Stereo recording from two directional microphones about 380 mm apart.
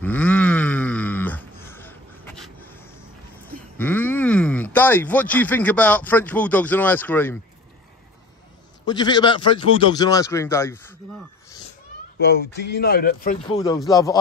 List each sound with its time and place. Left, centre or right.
0.0 s a sound: centre
3.4 s speech: centre
8.8 s a man's voice: centre
12.2 s speech: left; by 14.2 s centre